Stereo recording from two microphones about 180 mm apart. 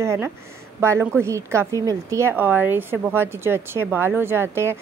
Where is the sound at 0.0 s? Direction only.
15° right (ahead or behind).